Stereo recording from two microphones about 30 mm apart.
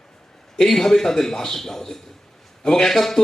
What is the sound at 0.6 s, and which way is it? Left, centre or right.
Speech, centre.